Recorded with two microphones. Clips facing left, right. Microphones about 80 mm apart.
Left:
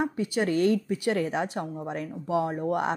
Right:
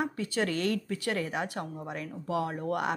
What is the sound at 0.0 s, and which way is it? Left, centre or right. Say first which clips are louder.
Speech: left 4 dB; left.